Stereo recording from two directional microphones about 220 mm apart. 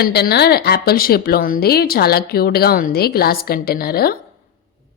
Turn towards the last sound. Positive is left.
turn(degrees=45)  # may be behind; listen again after turning